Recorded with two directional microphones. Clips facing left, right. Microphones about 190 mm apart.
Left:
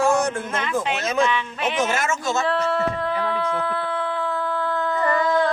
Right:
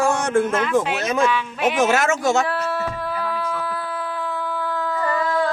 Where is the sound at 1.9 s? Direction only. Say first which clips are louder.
Right 5 dB; 90° right.